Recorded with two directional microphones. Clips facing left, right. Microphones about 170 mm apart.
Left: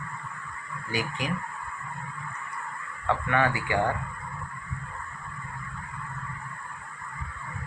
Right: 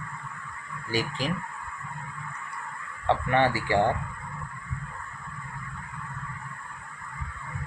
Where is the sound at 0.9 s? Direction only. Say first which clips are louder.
Right 2 dB; 30° right (ahead or behind).